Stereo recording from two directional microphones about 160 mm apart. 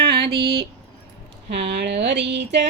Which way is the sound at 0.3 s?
35° right (ahead or behind).